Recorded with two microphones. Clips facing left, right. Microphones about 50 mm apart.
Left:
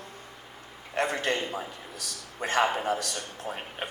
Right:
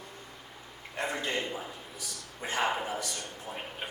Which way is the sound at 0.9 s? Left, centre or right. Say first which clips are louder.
Left 5 dB; left.